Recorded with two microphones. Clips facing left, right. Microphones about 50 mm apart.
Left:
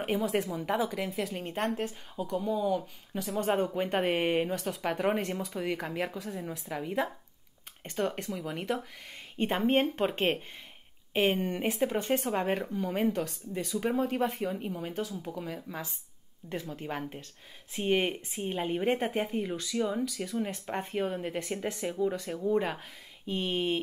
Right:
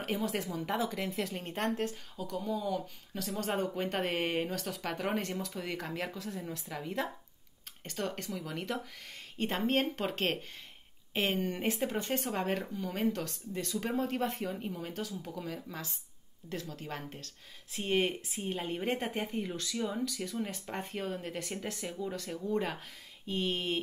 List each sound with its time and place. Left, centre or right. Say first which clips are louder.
0.0 s a woman's voice: left 5 dB; centre
11.5 s a woman's voice: left 4 dB; centre